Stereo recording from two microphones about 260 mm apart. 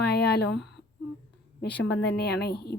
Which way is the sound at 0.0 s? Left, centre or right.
Left.